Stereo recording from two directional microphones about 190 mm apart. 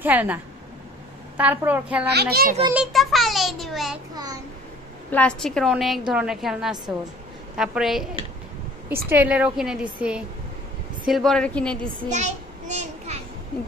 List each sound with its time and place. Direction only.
0.0 s a woman's voice: 10° right (ahead or behind)
2.1 s a child's voice: 50° right (ahead or behind)
2.7 s a child's voice: centre (ahead or behind)
4.1 s a child's voice: 20° right (ahead or behind)
5.1 s a woman's voice: 5° left (ahead or behind)
12.1 s a sound: 40° right (ahead or behind)